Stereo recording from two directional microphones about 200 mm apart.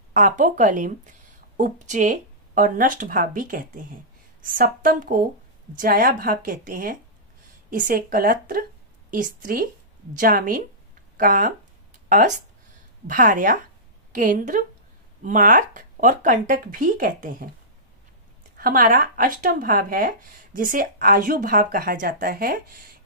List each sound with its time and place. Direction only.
0.1 s speech: 40° right (ahead or behind)
18.6 s speech: 45° right (ahead or behind)